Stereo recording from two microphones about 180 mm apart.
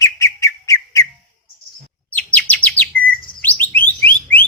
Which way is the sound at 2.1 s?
10° left (ahead or behind).